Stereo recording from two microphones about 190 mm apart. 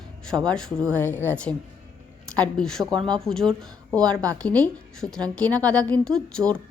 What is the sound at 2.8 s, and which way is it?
Speech, 20° right (ahead or behind).